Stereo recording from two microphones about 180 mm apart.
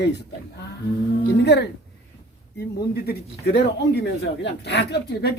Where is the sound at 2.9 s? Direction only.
60° left (ahead or behind).